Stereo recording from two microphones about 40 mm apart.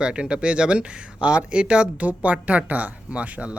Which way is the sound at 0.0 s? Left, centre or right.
Right.